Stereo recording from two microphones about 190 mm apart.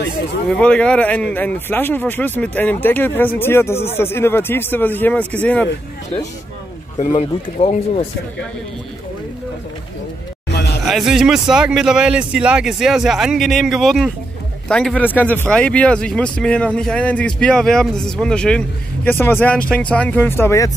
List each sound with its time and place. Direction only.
0.5 s speech: 5° left (ahead or behind)
7.0 s speech: 30° left (ahead or behind)
10.5 s a sound: 60° left (ahead or behind)
10.9 s speech: centre (ahead or behind); by 20.7 s 15° left (ahead or behind)